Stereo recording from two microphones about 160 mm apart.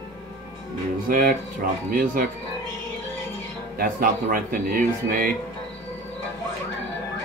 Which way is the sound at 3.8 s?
65° right (ahead or behind).